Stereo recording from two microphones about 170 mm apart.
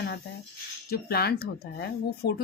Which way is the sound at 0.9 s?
65° left (ahead or behind).